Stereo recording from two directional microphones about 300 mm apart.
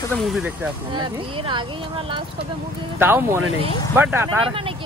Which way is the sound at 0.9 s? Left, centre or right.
Centre.